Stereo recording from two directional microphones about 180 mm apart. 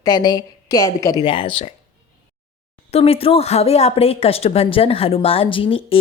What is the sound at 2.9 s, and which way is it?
A woman's voice, 35° left (ahead or behind).